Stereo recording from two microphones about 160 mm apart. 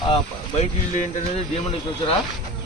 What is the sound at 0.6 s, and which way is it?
Speech, 45° left (ahead or behind).